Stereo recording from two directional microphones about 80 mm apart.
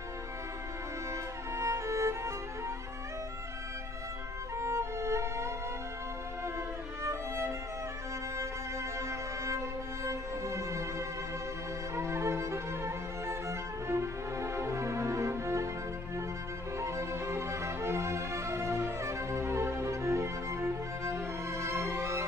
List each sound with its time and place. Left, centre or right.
1.6 s music: right
4.6 s music: right
7.0 s music: right
10.0 s music: right
16.7 s music: right